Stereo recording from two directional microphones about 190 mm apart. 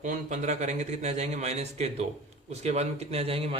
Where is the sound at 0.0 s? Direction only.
40° right (ahead or behind).